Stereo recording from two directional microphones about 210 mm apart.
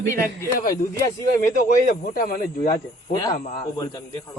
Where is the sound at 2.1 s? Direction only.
40° left (ahead or behind).